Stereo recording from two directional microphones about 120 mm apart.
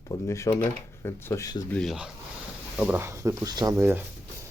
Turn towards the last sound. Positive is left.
turn(degrees=-20)  # may be behind; listen again after turning